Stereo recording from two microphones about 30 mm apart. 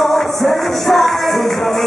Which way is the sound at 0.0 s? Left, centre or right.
Centre.